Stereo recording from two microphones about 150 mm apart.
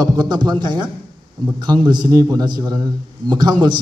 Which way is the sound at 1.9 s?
30° right (ahead or behind).